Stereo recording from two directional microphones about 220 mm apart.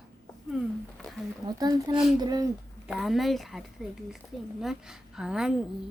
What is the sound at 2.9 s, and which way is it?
A woman's voice, centre (ahead or behind).